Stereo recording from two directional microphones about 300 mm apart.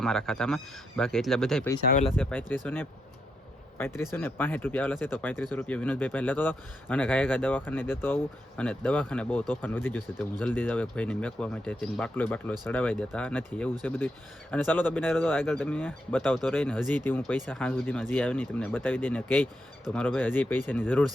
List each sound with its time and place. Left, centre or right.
0.0 s speech: centre
1.9 s speech: left
2.1 s speech: centre
3.8 s speech: centre